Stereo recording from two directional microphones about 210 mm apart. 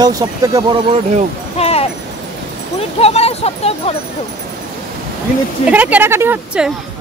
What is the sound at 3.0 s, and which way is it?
Speech, 30° left (ahead or behind).